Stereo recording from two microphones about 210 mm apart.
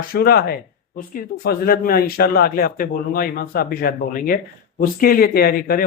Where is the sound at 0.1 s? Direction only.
45° left (ahead or behind).